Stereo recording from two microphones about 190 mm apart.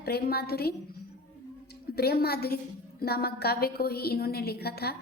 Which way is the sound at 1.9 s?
55° left (ahead or behind).